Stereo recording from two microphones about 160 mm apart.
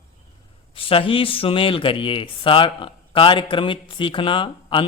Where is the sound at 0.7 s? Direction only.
35° left (ahead or behind).